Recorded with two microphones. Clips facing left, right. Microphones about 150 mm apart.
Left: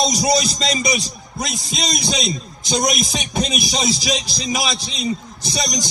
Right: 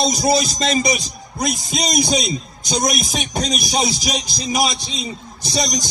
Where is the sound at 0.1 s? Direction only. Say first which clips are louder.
Right 1 dB; 45° right (ahead or behind).